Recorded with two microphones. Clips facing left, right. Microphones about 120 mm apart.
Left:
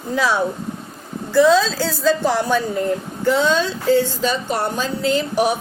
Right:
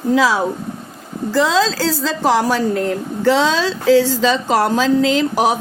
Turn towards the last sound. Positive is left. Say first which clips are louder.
# right 2 dB
turn(degrees=-90)